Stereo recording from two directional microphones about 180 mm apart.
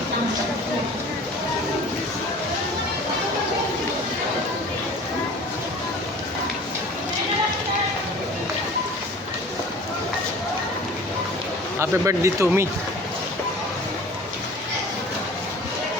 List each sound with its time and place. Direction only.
11.8 s speech: 15° right (ahead or behind)